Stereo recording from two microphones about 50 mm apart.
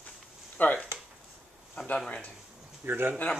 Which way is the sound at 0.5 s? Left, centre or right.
Left.